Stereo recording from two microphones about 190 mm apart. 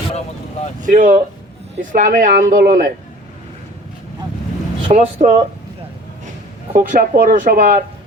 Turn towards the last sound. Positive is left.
turn(degrees=-45)  # may be behind; listen again after turning